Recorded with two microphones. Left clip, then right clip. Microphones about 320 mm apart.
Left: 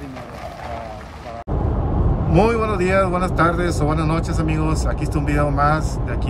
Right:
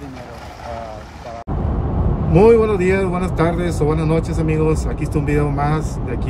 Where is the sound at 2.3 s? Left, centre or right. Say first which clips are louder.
Right 6 dB; centre.